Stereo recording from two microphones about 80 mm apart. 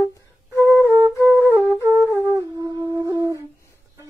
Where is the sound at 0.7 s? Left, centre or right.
Left.